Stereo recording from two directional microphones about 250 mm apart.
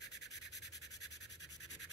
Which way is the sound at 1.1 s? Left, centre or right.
Left.